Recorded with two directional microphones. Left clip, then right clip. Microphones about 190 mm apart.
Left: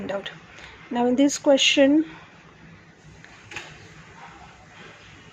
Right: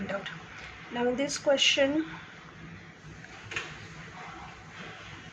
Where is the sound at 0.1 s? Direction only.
35° left (ahead or behind).